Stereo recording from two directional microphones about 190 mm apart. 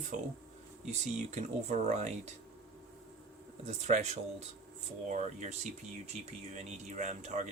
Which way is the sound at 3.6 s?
35° right (ahead or behind).